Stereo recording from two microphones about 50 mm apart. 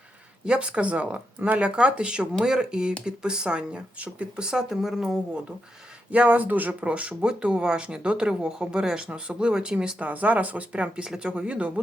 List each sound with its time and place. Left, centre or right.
0.4 s speech: right
6.1 s speech: right
10.0 s speech: right